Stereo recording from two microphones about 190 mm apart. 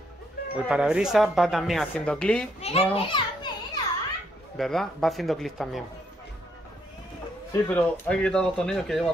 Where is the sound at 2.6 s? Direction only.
30° left (ahead or behind).